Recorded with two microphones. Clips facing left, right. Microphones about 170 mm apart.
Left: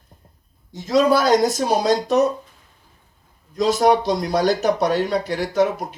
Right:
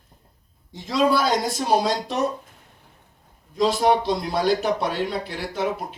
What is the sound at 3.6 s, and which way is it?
A man's voice, 45° left (ahead or behind).